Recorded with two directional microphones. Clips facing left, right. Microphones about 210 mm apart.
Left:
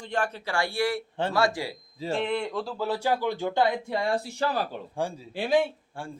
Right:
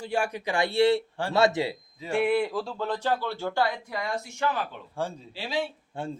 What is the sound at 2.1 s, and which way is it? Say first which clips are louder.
Speech: right 4 dB; 10° right (ahead or behind).